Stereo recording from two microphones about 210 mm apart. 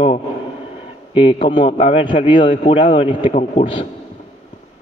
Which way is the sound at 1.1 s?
25° left (ahead or behind).